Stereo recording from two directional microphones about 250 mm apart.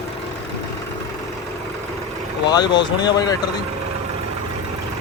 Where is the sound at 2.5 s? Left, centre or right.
Centre.